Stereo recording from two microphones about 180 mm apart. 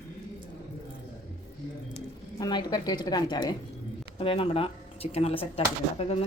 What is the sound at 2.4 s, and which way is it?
A woman's voice, 20° left (ahead or behind).